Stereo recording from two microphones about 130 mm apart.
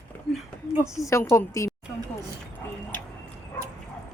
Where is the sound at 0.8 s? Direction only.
25° left (ahead or behind).